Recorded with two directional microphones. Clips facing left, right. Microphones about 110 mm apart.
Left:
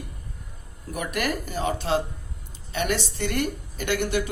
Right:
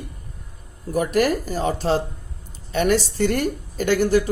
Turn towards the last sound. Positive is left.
turn(degrees=-35)  # may be behind; listen again after turning